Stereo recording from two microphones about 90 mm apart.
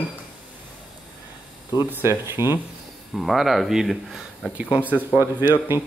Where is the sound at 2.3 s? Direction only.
30° right (ahead or behind).